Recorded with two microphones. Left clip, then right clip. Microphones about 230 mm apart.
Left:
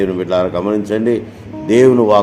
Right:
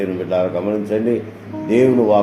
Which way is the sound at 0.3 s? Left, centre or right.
Left.